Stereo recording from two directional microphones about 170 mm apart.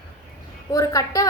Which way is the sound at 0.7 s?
20° left (ahead or behind).